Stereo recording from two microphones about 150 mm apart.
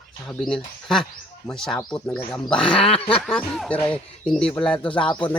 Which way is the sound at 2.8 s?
40° left (ahead or behind).